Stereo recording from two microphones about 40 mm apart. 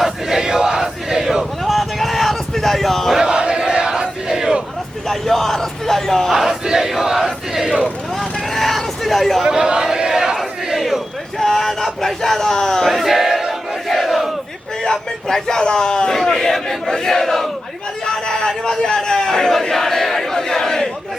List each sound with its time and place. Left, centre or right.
0.0 s battle cry: centre
3.2 s battle cry: centre
5.0 s a sound: centre
6.3 s battle cry: centre
8.2 s vehicle: centre
9.4 s chant: centre
10.3 s battle cry: centre
11.3 s a sound: centre
12.9 s battle cry: centre
13.8 s crowd: centre
14.8 s a man's voice: centre
19.7 s battle cry: centre